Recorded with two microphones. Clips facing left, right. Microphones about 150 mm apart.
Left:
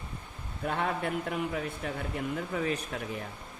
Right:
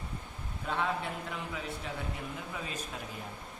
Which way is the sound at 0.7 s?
55° left (ahead or behind).